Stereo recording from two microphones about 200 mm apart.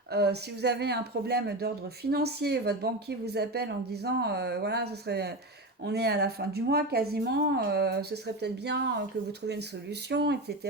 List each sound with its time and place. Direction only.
0.1 s speech: 55° right (ahead or behind)
10.1 s speech: 55° right (ahead or behind)